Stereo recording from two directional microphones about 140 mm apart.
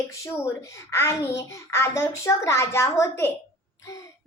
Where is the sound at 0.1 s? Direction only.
20° left (ahead or behind).